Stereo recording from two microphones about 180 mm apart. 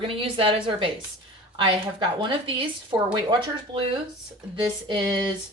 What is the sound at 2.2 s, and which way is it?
Speech, 30° right (ahead or behind).